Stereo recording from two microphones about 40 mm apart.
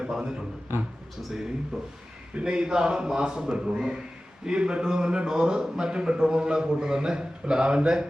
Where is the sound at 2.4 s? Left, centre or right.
Right.